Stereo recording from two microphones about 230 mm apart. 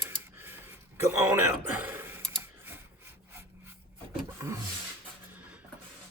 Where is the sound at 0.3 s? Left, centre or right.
Centre.